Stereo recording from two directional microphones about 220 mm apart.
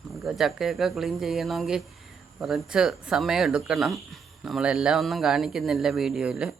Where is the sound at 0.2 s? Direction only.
Centre (ahead or behind).